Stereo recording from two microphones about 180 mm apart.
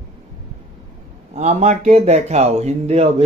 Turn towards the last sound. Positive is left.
turn(degrees=-35)  # may be behind; listen again after turning